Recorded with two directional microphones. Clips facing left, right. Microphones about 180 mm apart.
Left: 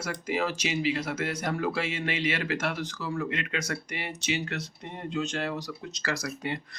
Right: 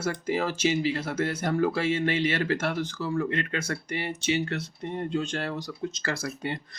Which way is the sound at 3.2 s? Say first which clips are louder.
Right 3 dB; 40° right (ahead or behind).